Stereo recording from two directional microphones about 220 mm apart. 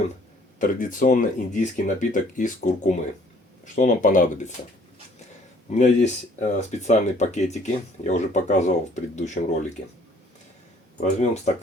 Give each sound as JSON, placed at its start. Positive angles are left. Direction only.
{"t": 0.6, "sound": "speech", "side_deg": 40}
{"t": 5.7, "sound": "speech", "side_deg": 30}
{"t": 11.0, "sound": "speech", "side_deg": 30}